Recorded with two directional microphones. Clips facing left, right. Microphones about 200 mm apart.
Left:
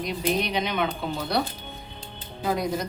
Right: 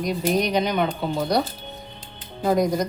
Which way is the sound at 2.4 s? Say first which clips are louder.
Right 6 dB; 45° right (ahead or behind).